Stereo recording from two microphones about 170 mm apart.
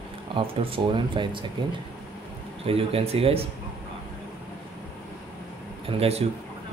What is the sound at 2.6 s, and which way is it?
Speech, 35° right (ahead or behind).